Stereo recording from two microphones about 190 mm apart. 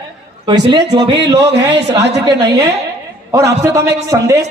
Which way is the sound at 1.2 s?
65° right (ahead or behind).